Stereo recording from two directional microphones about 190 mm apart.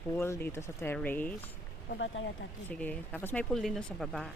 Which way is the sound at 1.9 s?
75° left (ahead or behind).